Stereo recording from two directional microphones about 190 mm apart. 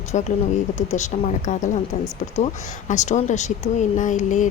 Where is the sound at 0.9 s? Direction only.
35° left (ahead or behind).